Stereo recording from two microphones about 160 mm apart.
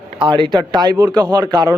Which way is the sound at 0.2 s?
30° right (ahead or behind).